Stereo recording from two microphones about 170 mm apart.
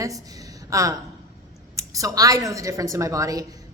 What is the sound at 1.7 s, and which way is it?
A woman's voice, 20° right (ahead or behind).